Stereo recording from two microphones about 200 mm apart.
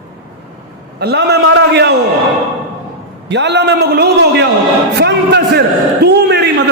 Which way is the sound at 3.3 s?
60° right (ahead or behind).